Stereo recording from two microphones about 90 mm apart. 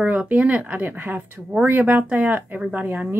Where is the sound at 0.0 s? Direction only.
15° right (ahead or behind).